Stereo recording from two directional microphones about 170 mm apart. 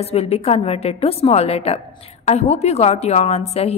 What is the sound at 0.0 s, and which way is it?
A woman's voice, 35° left (ahead or behind).